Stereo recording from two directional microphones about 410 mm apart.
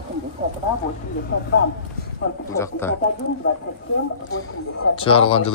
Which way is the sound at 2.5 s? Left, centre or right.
Centre.